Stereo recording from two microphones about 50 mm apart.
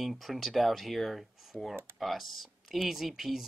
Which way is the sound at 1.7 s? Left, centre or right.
Right.